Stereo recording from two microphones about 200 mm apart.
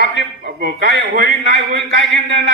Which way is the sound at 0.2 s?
55° right (ahead or behind).